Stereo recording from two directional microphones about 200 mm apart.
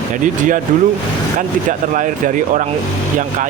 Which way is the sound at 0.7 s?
40° right (ahead or behind).